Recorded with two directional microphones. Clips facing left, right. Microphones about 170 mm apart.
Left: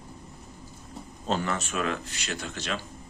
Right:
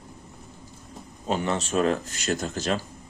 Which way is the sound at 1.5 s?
35° right (ahead or behind).